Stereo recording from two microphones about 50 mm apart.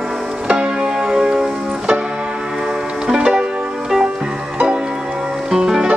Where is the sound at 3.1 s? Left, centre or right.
Centre.